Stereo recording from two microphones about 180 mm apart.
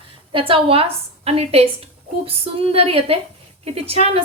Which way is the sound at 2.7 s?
35° right (ahead or behind).